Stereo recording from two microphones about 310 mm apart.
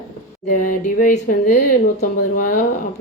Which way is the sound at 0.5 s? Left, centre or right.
Left.